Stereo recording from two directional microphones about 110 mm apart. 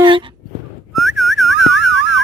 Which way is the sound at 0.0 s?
50° right (ahead or behind).